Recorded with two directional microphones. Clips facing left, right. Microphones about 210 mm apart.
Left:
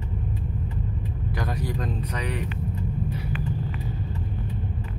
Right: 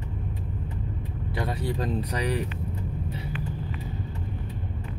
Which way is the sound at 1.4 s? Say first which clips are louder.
Right 1 dB; 25° right (ahead or behind).